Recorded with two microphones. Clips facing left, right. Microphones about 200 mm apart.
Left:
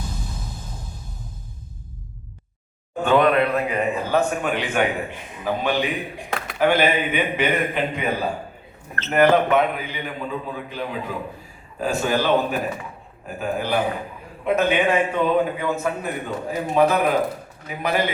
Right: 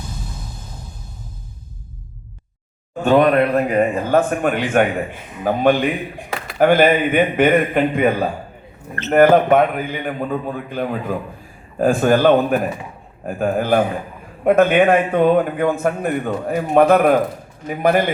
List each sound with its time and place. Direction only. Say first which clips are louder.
3.0 s a man's voice: right 4 dB; 45° right (ahead or behind)